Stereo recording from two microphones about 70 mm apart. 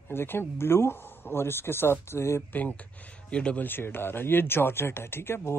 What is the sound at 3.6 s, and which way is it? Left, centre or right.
Speech, left.